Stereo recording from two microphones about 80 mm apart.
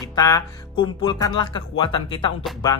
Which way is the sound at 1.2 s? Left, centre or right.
Left.